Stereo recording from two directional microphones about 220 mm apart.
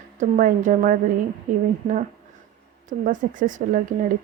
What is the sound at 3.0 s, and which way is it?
Speech, 35° right (ahead or behind).